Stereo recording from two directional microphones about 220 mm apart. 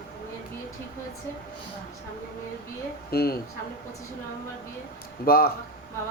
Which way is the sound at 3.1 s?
45° left (ahead or behind).